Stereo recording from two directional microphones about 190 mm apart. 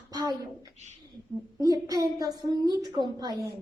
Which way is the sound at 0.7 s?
35° right (ahead or behind).